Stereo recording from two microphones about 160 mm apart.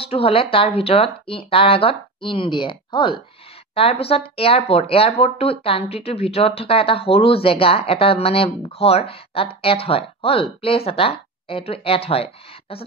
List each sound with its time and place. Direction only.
0.0 s speech: 35° left (ahead or behind)